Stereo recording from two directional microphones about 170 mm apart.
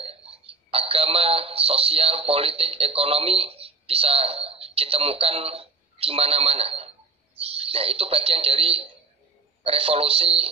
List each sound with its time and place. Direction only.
0.0 s a man's voice: 35° right (ahead or behind)